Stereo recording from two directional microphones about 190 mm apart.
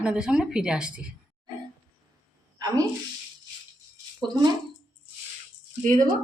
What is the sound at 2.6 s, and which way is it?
Speech, 20° right (ahead or behind).